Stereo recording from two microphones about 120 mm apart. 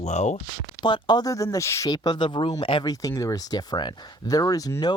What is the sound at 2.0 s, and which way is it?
Speech, 40° left (ahead or behind).